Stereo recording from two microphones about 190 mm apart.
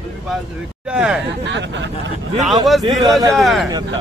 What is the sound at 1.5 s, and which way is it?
Speech, 70° right (ahead or behind).